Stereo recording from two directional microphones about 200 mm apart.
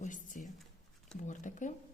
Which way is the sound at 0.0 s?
40° left (ahead or behind).